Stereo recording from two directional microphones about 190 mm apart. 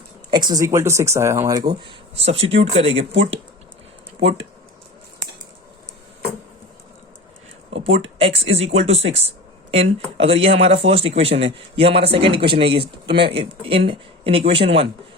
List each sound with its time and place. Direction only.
0.3 s speech: 20° right (ahead or behind)
7.9 s speech: 30° right (ahead or behind)